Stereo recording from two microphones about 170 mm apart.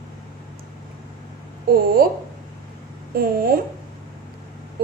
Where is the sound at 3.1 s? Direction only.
60° right (ahead or behind).